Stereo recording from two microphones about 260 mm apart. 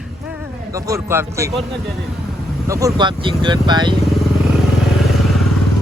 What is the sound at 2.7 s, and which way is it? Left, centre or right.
Speech, centre.